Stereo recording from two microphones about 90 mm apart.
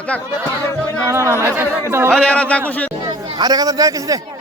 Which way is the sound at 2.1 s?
10° left (ahead or behind).